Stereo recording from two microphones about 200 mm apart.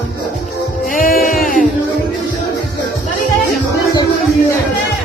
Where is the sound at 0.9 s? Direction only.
45° left (ahead or behind).